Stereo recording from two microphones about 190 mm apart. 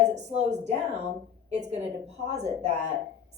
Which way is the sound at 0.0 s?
35° right (ahead or behind).